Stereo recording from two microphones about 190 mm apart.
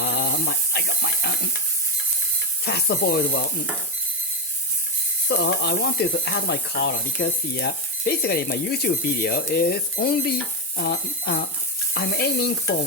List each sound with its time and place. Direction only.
0.0 s a sound: 55° left (ahead or behind)
2.6 s speech: 60° left (ahead or behind)
5.3 s speech: 60° left (ahead or behind)